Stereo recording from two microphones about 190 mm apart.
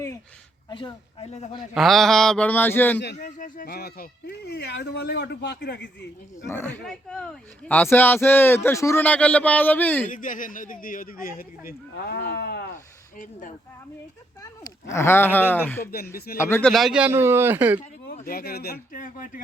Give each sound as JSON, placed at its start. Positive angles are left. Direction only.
{"t": 0.7, "sound": "speech", "side_deg": 25}
{"t": 1.7, "sound": "a man's voice", "side_deg": 0}
{"t": 3.2, "sound": "speech", "side_deg": 40}
{"t": 6.5, "sound": "speech", "side_deg": 10}
{"t": 10.1, "sound": "speech", "side_deg": 45}
{"t": 14.4, "sound": "speech", "side_deg": 15}
{"t": 16.1, "sound": "speech", "side_deg": 55}
{"t": 16.4, "sound": "a man's voice", "side_deg": 10}
{"t": 18.0, "sound": "speech", "side_deg": 55}